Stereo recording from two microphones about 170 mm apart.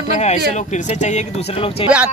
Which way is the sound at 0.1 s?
40° left (ahead or behind).